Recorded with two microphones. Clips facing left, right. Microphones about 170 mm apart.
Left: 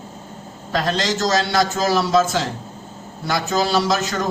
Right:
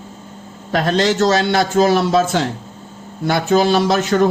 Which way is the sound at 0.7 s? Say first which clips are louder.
Right 5 dB; 55° right (ahead or behind).